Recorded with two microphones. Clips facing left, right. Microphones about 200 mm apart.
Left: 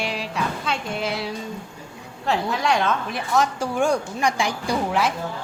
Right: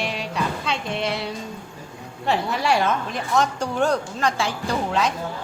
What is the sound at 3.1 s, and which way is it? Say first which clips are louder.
Speech: even; 5° left (ahead or behind).